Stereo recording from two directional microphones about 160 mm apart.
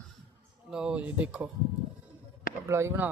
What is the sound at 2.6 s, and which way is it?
Speech, 15° right (ahead or behind).